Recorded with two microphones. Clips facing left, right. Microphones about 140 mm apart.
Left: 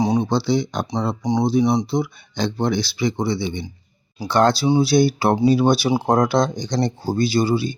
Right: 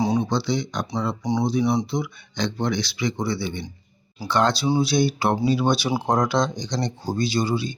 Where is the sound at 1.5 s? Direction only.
35° left (ahead or behind).